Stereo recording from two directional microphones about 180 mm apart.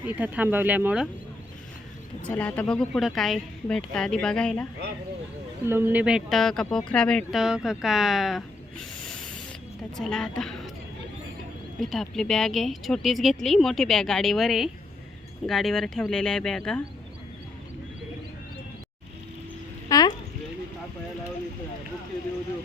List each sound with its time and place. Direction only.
0.0 s speech: 10° right (ahead or behind)
2.2 s speech: 10° left (ahead or behind)
5.6 s speech: 10° right (ahead or behind); by 10.5 s 5° left (ahead or behind)
11.8 s speech: centre (ahead or behind)
19.9 s a sound: 20° left (ahead or behind)